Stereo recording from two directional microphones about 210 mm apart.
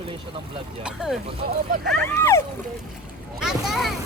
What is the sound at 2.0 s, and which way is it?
Speech, 10° left (ahead or behind).